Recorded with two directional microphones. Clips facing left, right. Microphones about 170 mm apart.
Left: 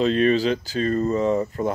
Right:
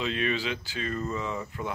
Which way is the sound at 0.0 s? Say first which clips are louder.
Left 11 dB; 40° left (ahead or behind).